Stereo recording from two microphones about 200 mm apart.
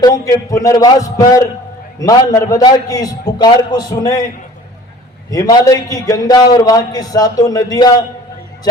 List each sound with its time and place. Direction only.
0.0 s a man's voice: 15° left (ahead or behind)
5.3 s a man's voice: 15° left (ahead or behind)